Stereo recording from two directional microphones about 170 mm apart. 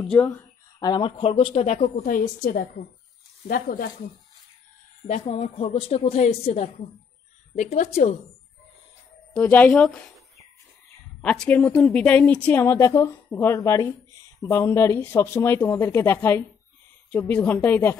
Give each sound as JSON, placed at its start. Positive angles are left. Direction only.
{"t": 0.0, "sound": "speech", "side_deg": 5}
{"t": 0.4, "sound": "a sound", "side_deg": 25}
{"t": 1.4, "sound": "speech", "side_deg": 40}
{"t": 2.0, "sound": "a woman's voice", "side_deg": 50}
{"t": 5.2, "sound": "a woman's voice", "side_deg": 40}
{"t": 9.3, "sound": "a woman's voice", "side_deg": 10}